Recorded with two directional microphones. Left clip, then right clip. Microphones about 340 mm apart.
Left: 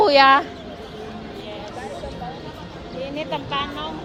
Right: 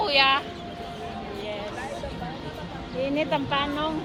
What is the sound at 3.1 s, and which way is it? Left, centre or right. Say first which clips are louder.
Speech: even; centre.